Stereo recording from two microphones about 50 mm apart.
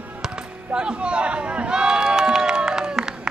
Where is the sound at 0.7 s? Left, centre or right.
Right.